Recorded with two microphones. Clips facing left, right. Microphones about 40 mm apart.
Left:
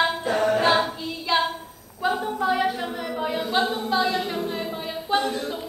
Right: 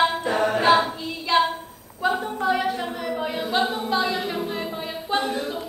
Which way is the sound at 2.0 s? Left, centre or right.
Centre.